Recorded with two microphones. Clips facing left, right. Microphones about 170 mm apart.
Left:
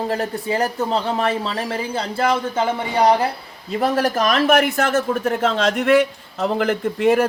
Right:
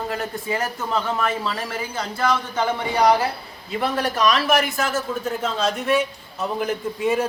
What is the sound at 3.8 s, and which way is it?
Speech, 45° left (ahead or behind).